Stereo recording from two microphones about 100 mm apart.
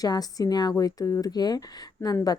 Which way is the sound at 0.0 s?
40° left (ahead or behind).